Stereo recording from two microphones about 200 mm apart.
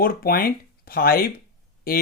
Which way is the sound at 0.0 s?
45° left (ahead or behind).